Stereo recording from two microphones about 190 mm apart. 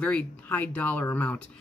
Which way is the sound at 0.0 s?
5° left (ahead or behind).